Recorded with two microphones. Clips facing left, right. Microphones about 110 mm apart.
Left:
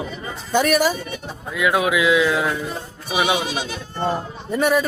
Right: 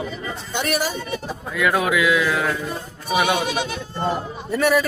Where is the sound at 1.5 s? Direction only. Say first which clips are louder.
Left 1 dB; 15° left (ahead or behind).